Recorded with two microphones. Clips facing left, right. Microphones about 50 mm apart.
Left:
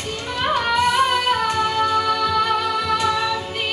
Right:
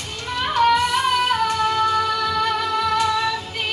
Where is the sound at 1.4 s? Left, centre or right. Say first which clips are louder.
Even; left.